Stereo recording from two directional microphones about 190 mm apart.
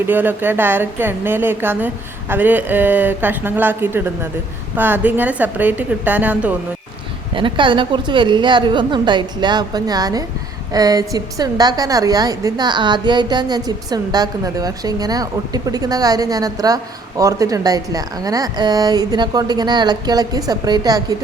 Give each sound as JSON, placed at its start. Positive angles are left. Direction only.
{"t": 0.0, "sound": "speech", "side_deg": -10}
{"t": 7.3, "sound": "a woman's voice", "side_deg": -25}